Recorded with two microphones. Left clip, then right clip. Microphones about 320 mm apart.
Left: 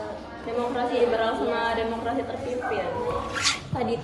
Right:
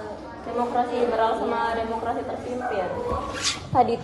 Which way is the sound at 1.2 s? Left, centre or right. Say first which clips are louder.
Right 2 dB; centre.